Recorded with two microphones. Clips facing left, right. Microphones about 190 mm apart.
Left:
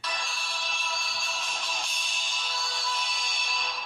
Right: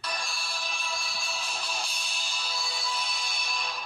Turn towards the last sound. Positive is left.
turn(degrees=-5)  # may be behind; listen again after turning